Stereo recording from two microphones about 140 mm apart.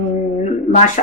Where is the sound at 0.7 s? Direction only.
65° left (ahead or behind).